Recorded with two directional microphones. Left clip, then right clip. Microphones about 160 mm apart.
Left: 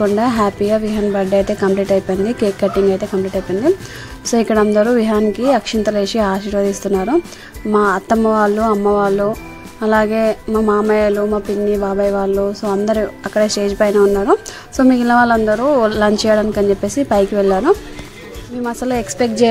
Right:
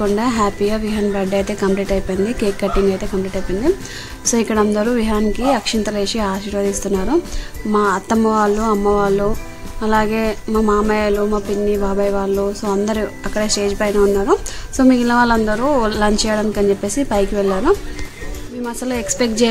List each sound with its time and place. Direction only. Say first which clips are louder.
0.0 s speech: left 2 dB; 25° left (ahead or behind)
4.2 s speech: left 2 dB; 30° left (ahead or behind)